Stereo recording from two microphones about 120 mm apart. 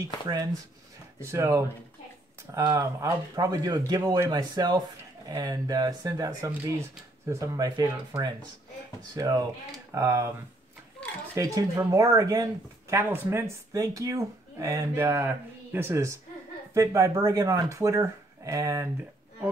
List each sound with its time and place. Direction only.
1.2 s speech: 25° right (ahead or behind)
11.3 s speech: 30° right (ahead or behind)
12.9 s speech: 20° right (ahead or behind)